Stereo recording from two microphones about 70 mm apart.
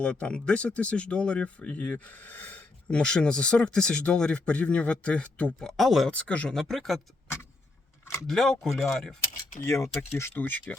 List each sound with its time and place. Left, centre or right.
0.0 s speech: centre
5.5 s speech: centre
6.1 s speech: centre
6.5 s speech: centre
8.3 s speech: centre
9.6 s speech: left
10.3 s speech: left